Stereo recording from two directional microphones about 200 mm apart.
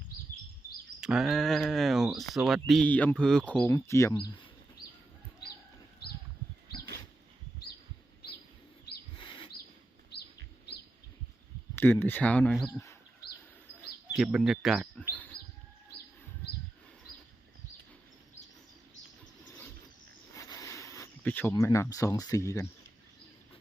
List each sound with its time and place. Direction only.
1.0 s speech: centre (ahead or behind); by 4.4 s 20° left (ahead or behind)
11.7 s speech: 10° left (ahead or behind)
14.2 s speech: 5° right (ahead or behind)
20.3 s a sound: 15° left (ahead or behind)
21.5 s speech: 15° left (ahead or behind)